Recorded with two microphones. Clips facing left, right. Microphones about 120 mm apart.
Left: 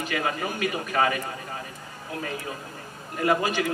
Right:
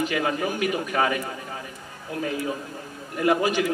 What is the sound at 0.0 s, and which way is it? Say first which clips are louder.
A man's voice: right 3 dB; 20° right (ahead or behind).